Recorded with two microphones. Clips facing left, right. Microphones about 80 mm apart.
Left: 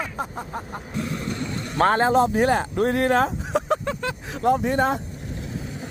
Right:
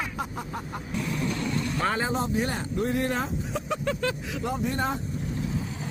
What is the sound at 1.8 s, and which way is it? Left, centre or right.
Speech, left.